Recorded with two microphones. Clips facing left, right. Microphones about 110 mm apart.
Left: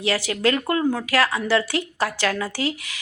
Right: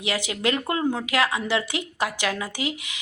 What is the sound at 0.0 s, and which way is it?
A woman's voice, 20° right (ahead or behind).